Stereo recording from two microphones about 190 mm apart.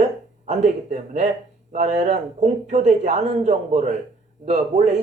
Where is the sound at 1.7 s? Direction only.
35° right (ahead or behind).